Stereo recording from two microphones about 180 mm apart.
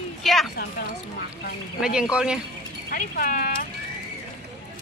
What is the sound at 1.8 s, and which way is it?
Speech, 5° right (ahead or behind).